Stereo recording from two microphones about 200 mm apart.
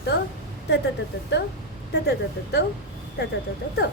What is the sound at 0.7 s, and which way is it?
Speech, 55° left (ahead or behind).